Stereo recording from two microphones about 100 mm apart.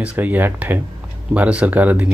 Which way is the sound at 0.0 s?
15° right (ahead or behind).